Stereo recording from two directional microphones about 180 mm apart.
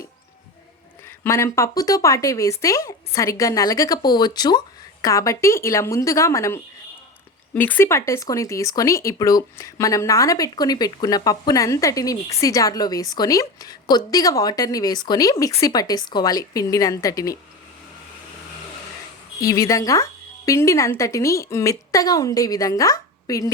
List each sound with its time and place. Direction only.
1.0 s speech: 15° left (ahead or behind)
19.4 s speech: 20° left (ahead or behind)